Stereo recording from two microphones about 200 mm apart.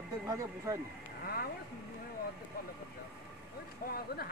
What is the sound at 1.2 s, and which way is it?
Speech, 50° left (ahead or behind).